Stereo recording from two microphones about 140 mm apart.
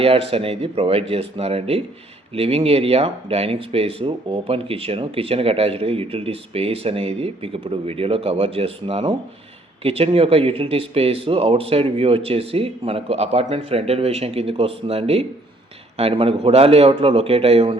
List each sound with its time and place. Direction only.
0.0 s speech: 45° right (ahead or behind)